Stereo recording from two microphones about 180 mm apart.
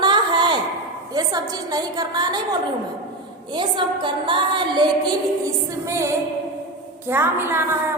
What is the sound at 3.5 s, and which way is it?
A woman's voice, 25° right (ahead or behind).